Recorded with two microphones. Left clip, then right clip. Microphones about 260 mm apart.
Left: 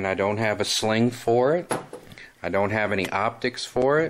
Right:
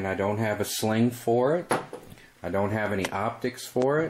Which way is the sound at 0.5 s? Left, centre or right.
Centre.